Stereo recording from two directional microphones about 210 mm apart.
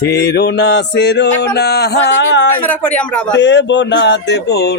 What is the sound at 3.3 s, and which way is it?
Speech, 60° left (ahead or behind).